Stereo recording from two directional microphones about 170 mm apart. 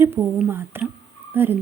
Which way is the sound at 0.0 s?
15° right (ahead or behind).